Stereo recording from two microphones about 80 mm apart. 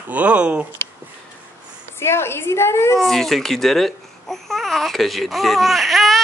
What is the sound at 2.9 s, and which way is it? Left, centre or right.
Babbling, centre.